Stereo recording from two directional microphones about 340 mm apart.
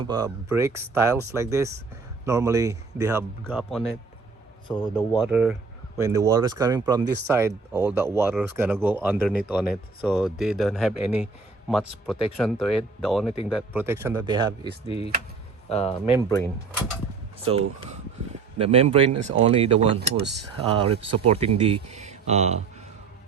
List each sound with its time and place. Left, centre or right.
0.0 s speech: centre
4.7 s speech: centre
5.1 s speech: centre
15.7 s speech: centre
17.5 s speech: centre
20.0 s speech: right
20.7 s speech: centre